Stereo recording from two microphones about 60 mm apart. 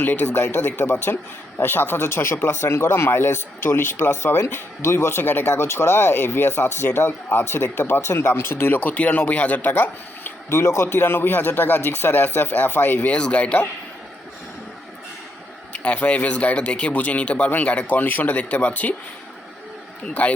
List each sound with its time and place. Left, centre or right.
0.0 s speech: left
5.6 s speech: left
10.5 s speech: left
10.8 s speech: left
13.1 s speech: centre
15.7 s speech: centre
20.2 s speech: left